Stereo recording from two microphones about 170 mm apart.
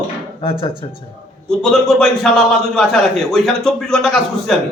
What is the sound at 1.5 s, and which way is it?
A man's voice, centre (ahead or behind).